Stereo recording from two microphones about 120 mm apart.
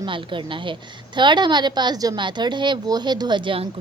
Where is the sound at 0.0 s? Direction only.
45° right (ahead or behind).